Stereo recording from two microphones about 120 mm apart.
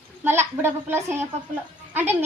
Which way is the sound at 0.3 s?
20° right (ahead or behind).